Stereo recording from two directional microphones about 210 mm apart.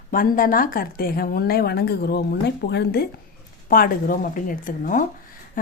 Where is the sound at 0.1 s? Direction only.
40° left (ahead or behind).